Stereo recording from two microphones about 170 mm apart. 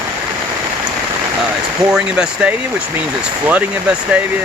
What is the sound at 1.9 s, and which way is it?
Speech, 5° right (ahead or behind).